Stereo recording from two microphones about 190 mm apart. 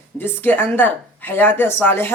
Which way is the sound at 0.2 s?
10° left (ahead or behind).